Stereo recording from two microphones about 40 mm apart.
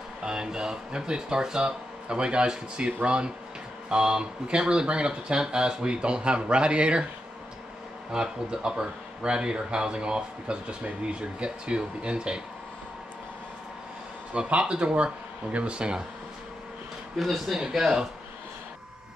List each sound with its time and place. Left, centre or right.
0.2 s speech: centre
8.1 s speech: right
14.3 s speech: right
17.2 s speech: centre
17.6 s speech: centre